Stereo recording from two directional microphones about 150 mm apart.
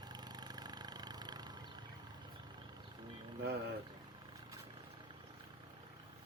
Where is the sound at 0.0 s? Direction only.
30° right (ahead or behind).